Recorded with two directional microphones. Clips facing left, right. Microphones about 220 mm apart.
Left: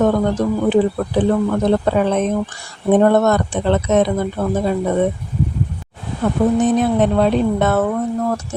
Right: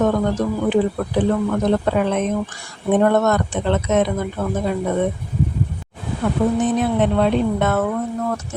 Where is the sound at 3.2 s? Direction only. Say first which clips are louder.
Left 3 dB; 35° left (ahead or behind).